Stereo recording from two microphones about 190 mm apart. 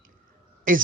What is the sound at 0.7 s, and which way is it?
Speech, 45° right (ahead or behind).